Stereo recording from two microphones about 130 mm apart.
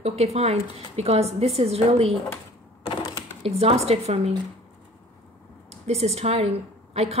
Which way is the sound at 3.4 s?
50° right (ahead or behind).